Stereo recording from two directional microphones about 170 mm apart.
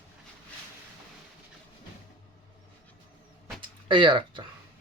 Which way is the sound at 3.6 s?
30° right (ahead or behind).